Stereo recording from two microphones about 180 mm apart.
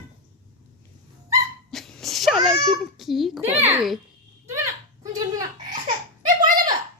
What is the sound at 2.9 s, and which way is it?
Speech, centre (ahead or behind).